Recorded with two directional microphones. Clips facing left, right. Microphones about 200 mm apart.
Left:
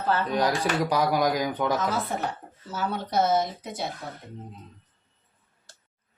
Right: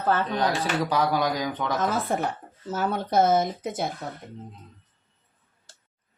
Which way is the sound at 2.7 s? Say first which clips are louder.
Right 3 dB; 50° right (ahead or behind).